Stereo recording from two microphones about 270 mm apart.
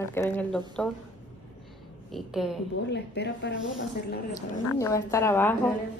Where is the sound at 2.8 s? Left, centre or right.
Left.